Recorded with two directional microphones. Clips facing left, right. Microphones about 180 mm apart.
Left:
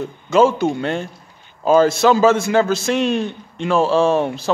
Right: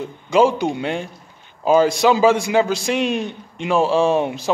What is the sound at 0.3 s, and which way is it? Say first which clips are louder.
A man's voice: left 1 dB; 15° right (ahead or behind).